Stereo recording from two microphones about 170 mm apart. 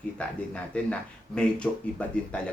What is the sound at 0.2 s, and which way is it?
Speech, 5° left (ahead or behind).